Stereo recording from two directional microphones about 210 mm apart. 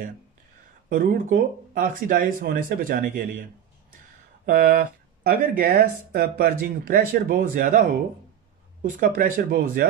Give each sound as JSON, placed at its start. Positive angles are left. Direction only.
{"t": 0.8, "sound": "speech", "side_deg": -40}
{"t": 4.5, "sound": "speech", "side_deg": -40}